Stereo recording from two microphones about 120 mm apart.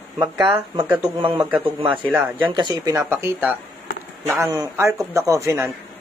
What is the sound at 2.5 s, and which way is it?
Speech, 40° right (ahead or behind).